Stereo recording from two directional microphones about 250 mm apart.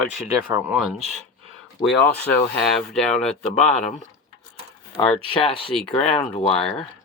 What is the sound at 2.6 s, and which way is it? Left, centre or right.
Speech, centre.